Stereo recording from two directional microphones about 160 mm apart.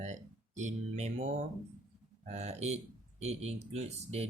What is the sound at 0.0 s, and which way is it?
Speech, 50° right (ahead or behind).